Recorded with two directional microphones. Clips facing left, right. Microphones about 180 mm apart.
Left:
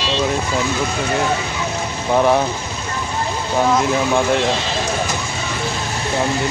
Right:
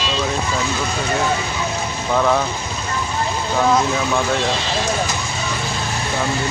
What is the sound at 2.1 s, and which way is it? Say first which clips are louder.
Speech: left 3 dB; 20° left (ahead or behind).